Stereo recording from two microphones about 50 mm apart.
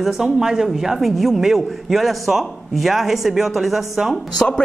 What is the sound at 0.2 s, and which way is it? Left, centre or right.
Speech, centre.